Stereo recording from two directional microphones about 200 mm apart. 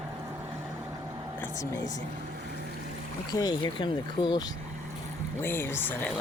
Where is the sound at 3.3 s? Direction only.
20° left (ahead or behind).